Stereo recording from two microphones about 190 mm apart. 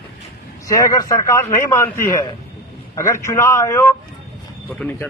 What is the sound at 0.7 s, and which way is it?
A man's voice, 15° left (ahead or behind).